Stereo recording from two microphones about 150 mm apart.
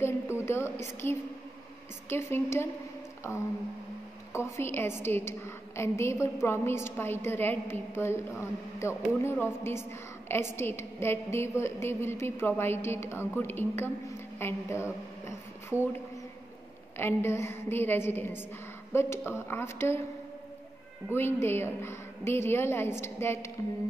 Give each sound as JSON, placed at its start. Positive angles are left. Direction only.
{"t": 0.0, "sound": "a woman's voice", "side_deg": 15}
{"t": 4.3, "sound": "a woman's voice", "side_deg": 15}
{"t": 16.9, "sound": "a woman's voice", "side_deg": 15}
{"t": 21.1, "sound": "a woman's voice", "side_deg": 15}